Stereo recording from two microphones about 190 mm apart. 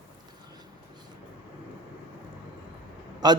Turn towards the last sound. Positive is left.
turn(degrees=-20)  # may be behind; listen again after turning